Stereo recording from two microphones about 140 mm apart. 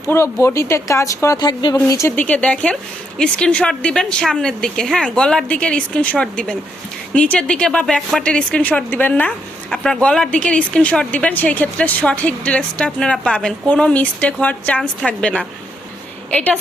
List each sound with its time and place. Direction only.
0.0 s a woman's voice: 20° left (ahead or behind)